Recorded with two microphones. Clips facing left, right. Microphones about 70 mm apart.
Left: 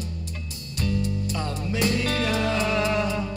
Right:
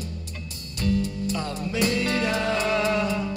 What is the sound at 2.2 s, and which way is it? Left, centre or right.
Music, right.